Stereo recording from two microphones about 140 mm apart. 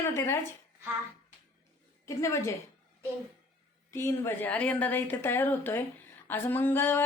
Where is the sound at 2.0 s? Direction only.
20° left (ahead or behind).